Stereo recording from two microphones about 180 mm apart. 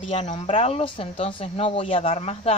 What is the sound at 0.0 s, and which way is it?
Speech, 35° left (ahead or behind).